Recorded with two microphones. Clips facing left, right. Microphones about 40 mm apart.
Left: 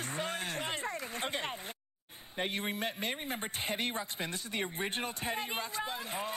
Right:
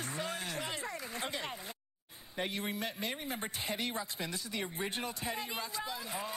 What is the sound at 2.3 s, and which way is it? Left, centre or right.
Speech, left.